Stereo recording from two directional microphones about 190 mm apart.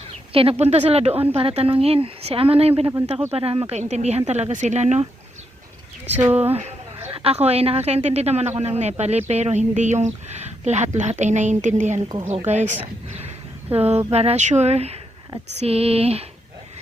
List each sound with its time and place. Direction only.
0.1 s a woman's voice: 30° right (ahead or behind)
6.1 s speech: 10° right (ahead or behind)
6.5 s a woman's voice: 35° right (ahead or behind)